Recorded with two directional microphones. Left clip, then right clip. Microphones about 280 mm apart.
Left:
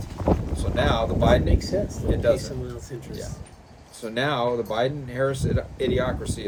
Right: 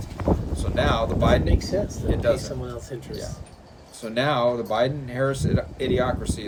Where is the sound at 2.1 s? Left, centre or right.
Centre.